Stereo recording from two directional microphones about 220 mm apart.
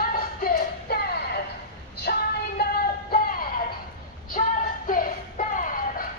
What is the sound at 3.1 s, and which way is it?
Music, 40° left (ahead or behind).